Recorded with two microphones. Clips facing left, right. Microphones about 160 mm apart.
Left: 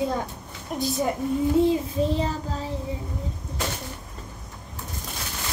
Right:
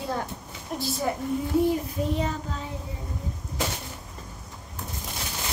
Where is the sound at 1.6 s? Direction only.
25° left (ahead or behind).